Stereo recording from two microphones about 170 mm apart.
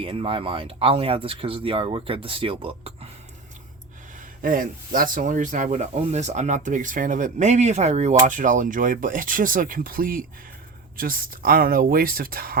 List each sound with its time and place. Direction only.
0.0 s speech: 35° right (ahead or behind)
4.4 s speech: 55° right (ahead or behind)